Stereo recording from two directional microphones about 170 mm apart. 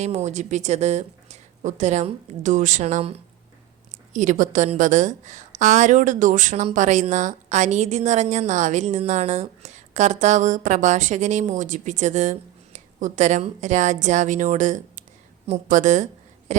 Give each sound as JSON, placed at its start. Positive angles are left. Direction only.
{"t": 0.0, "sound": "a woman's voice", "side_deg": -40}
{"t": 4.1, "sound": "a woman's voice", "side_deg": -45}
{"t": 16.5, "sound": "a sound", "side_deg": -45}